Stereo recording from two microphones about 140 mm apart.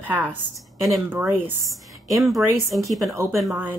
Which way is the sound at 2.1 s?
Centre (ahead or behind).